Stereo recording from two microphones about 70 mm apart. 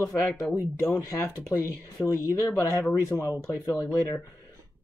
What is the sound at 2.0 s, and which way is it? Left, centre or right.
Speech, left.